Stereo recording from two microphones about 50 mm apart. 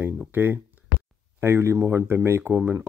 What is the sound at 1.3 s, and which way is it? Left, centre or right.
Speech, right.